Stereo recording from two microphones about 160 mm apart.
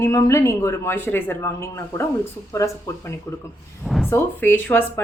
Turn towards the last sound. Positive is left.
turn(degrees=10)  # may be behind; listen again after turning